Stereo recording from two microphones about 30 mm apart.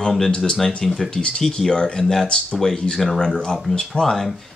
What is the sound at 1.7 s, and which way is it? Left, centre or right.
Speech, left.